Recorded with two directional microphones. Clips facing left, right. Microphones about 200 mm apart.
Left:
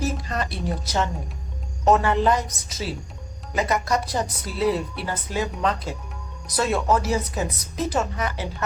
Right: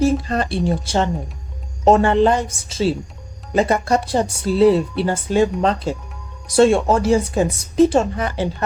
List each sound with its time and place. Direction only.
0.0 s speech: 30° right (ahead or behind)